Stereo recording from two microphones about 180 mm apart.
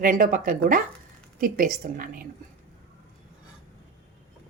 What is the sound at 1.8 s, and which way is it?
Speech, 50° right (ahead or behind).